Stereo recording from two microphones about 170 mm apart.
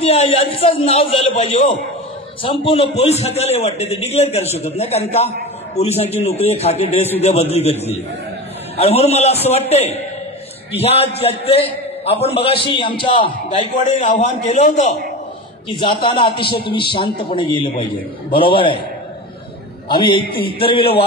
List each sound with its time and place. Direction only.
0.0 s a man's voice: 35° left (ahead or behind)
8.7 s a man's voice: 35° left (ahead or behind)
13.8 s a man's voice: 45° left (ahead or behind)
15.7 s a man's voice: 30° left (ahead or behind)
19.9 s a man's voice: 30° left (ahead or behind)